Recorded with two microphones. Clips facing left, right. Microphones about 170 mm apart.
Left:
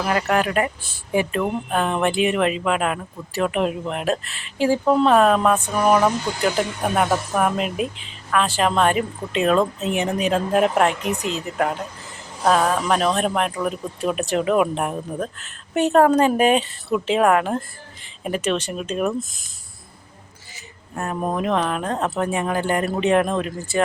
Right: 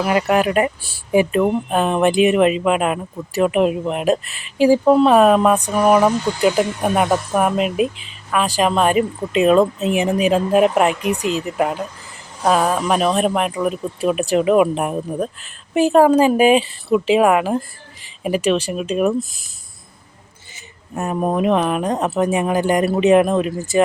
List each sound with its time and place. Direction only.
0.1 s speech: 15° right (ahead or behind)
12.5 s speech: 10° right (ahead or behind)
20.9 s speech: 15° right (ahead or behind)